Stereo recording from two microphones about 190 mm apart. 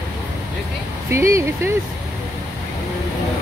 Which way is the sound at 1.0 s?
15° right (ahead or behind).